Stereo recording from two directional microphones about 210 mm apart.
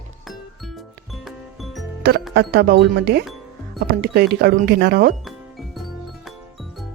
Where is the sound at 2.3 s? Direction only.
50° right (ahead or behind).